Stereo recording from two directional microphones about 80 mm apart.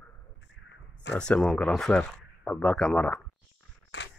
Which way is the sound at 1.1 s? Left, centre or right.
Centre.